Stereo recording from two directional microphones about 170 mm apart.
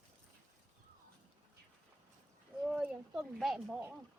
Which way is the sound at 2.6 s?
5° right (ahead or behind).